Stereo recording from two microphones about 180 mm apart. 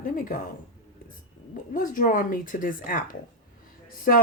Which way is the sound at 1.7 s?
50° left (ahead or behind).